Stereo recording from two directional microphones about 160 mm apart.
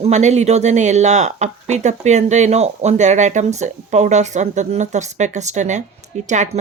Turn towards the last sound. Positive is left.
turn(degrees=-50)  # may be behind; listen again after turning